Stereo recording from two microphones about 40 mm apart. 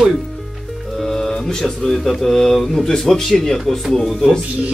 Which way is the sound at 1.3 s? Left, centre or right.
Centre.